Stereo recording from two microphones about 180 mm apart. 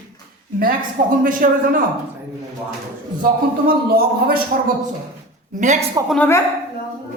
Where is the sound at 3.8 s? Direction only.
55° right (ahead or behind).